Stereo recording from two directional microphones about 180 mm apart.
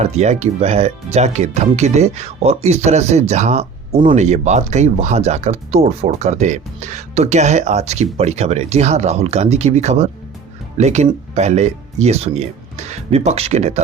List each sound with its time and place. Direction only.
0.0 s speech: 40° right (ahead or behind)